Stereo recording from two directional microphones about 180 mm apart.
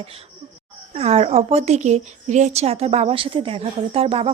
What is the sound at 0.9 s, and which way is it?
A woman's voice, 35° right (ahead or behind).